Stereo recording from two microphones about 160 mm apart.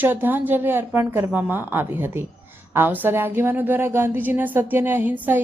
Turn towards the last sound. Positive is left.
turn(degrees=-10)  # may be behind; listen again after turning